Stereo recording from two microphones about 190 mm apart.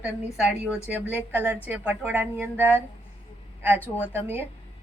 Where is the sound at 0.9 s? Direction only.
10° right (ahead or behind).